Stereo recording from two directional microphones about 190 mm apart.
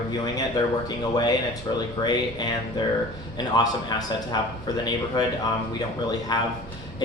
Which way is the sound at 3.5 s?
20° left (ahead or behind).